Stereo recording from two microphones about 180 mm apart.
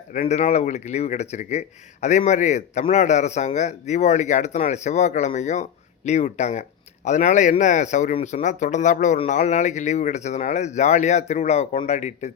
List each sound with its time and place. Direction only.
0.1 s speech: 45° left (ahead or behind)